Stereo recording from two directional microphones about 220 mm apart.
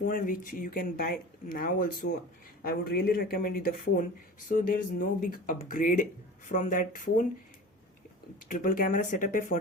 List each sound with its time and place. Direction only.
0.0 s speech: 40° left (ahead or behind)
8.4 s speech: 40° left (ahead or behind)